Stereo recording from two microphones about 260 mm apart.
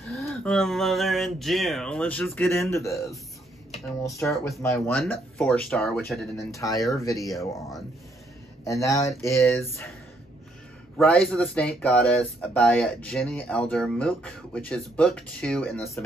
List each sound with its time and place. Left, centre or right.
0.2 s speech: centre
6.5 s speech: centre
8.6 s speech: centre
11.0 s speech: centre